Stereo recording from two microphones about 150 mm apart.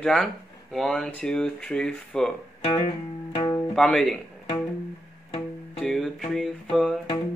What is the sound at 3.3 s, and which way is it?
Music, 30° left (ahead or behind).